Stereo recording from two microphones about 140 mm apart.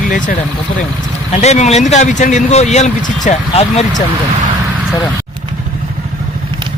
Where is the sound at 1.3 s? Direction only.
50° left (ahead or behind).